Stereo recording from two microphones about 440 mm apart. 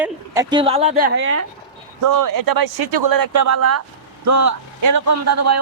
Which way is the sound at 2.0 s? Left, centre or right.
Right.